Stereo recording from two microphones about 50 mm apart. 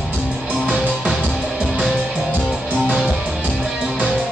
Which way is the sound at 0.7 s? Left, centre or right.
Centre.